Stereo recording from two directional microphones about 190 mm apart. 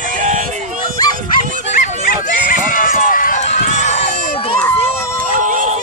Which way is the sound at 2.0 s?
45° left (ahead or behind).